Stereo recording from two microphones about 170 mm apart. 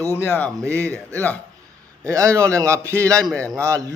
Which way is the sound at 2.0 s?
20° right (ahead or behind).